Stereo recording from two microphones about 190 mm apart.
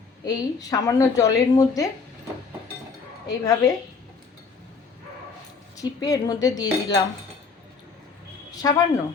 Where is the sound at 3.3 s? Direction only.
20° left (ahead or behind).